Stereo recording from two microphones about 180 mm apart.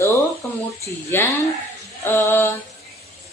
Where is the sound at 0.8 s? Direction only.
10° left (ahead or behind).